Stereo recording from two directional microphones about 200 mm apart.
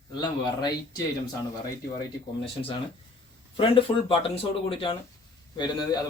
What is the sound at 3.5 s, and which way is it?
A man's voice, 25° left (ahead or behind).